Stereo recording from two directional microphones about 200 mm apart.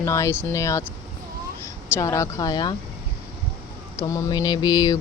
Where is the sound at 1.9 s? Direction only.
15° left (ahead or behind).